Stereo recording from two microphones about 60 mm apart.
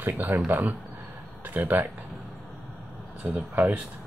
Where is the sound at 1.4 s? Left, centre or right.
Right.